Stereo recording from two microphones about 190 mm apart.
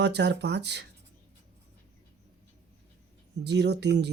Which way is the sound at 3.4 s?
65° right (ahead or behind).